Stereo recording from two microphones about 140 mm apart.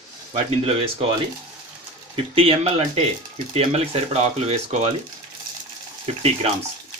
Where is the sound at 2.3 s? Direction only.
40° right (ahead or behind).